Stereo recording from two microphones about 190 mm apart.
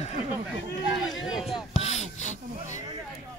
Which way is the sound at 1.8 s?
35° left (ahead or behind).